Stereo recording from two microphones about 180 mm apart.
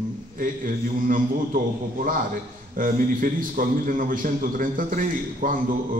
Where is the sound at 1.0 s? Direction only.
50° right (ahead or behind).